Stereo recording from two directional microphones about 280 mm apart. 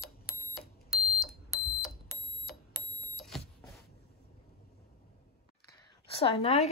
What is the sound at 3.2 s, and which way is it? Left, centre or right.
Vehicle, centre.